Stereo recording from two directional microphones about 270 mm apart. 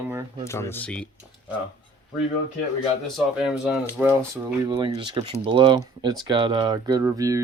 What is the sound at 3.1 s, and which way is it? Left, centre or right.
Speech, centre.